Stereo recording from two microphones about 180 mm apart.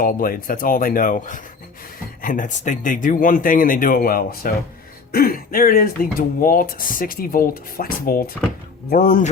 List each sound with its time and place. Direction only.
0.0 s speech: 50° left (ahead or behind)